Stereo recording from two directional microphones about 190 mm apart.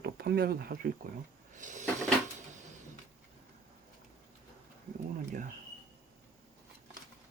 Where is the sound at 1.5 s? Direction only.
40° right (ahead or behind).